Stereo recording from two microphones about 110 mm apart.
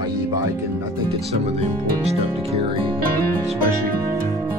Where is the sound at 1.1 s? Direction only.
70° right (ahead or behind); by 3.0 s 50° right (ahead or behind).